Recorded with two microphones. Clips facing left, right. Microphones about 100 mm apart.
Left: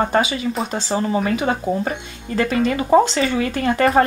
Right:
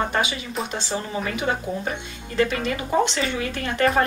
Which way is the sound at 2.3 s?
35° left (ahead or behind).